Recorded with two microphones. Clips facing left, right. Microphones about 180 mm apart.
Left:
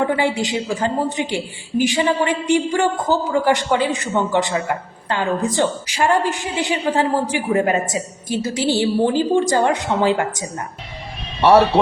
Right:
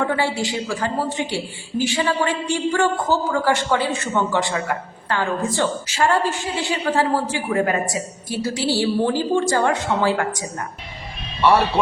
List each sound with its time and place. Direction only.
0.0 s a woman's voice: 15° left (ahead or behind)